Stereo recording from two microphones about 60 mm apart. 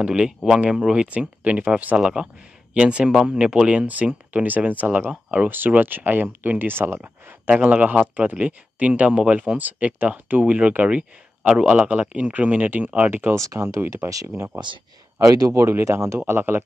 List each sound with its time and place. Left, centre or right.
0.0 s speech: centre
3.8 s speech: right
5.5 s speech: right
6.8 s speech: right
7.4 s speech: centre
9.6 s speech: right
13.4 s speech: right
14.0 s speech: right
15.1 s speech: right
15.8 s speech: right
16.3 s speech: right